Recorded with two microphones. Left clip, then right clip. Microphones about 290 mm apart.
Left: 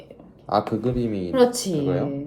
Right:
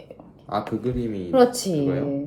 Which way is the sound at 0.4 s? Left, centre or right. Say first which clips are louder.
Left 4 dB; centre.